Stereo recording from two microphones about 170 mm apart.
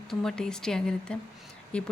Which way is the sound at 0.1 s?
5° left (ahead or behind).